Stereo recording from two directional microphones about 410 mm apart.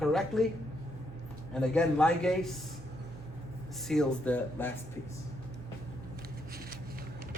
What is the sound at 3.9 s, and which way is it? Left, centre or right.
Speech, centre.